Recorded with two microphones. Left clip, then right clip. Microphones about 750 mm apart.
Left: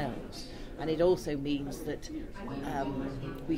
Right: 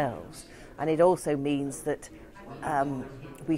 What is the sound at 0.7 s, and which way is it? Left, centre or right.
Speech, right.